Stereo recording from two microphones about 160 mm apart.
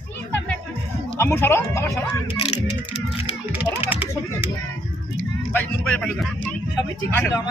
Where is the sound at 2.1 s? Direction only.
35° left (ahead or behind).